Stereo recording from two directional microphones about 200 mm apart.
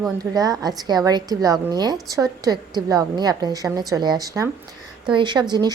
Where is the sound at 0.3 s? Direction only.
20° right (ahead or behind).